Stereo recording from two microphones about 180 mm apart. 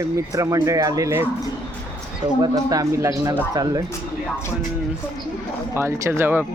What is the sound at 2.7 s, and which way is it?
Speech, 20° right (ahead or behind).